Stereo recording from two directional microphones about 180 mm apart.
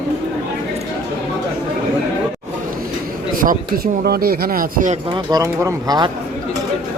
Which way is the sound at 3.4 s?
50° right (ahead or behind).